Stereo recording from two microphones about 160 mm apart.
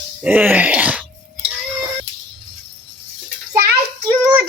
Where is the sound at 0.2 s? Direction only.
10° right (ahead or behind).